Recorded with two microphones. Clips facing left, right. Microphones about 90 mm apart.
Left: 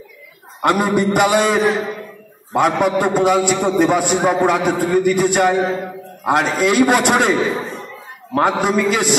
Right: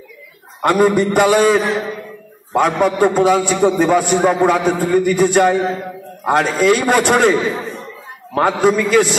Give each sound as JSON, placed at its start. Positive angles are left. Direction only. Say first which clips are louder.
{"t": 0.6, "sound": "a man's voice", "louder": "right 3 dB", "side_deg": 15}
{"t": 8.4, "sound": "a man's voice", "louder": "right 2 dB", "side_deg": 15}